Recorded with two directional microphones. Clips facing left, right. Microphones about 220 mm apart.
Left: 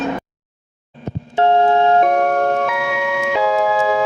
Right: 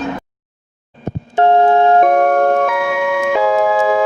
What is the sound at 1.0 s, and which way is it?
Glockenspiel, 55° right (ahead or behind).